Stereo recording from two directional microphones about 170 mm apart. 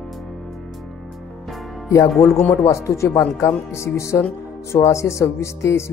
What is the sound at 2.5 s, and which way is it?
Speech, 15° left (ahead or behind).